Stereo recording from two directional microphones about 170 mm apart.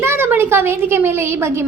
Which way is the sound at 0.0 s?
15° right (ahead or behind).